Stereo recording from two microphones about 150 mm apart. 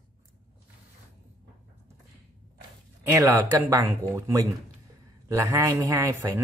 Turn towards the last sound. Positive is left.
turn(degrees=-20)  # may be behind; listen again after turning